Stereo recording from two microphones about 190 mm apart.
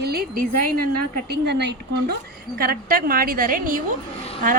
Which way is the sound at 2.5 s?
50° right (ahead or behind).